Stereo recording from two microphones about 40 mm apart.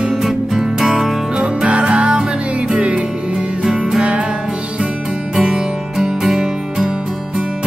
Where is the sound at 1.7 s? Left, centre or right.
Right.